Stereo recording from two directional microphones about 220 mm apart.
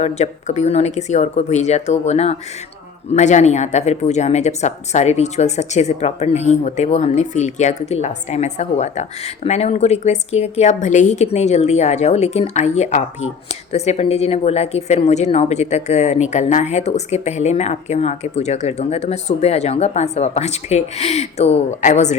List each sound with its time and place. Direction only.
0.0 s speech: 30° left (ahead or behind)